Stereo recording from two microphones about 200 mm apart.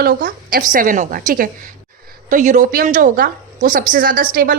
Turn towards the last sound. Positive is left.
turn(degrees=-45)  # may be behind; listen again after turning